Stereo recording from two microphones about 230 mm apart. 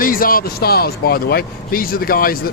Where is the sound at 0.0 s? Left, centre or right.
Left.